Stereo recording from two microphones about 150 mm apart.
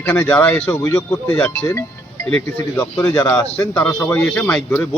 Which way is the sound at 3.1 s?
20° left (ahead or behind).